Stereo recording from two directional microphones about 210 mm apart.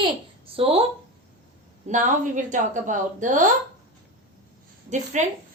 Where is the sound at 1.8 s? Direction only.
35° right (ahead or behind).